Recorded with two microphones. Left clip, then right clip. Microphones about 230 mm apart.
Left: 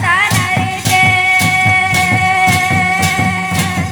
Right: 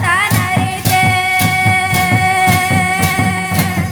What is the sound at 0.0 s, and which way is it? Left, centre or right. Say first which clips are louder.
Music: left 2 dB; right.